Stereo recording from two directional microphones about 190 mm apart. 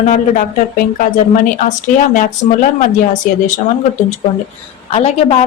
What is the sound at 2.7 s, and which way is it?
Speech, 40° left (ahead or behind).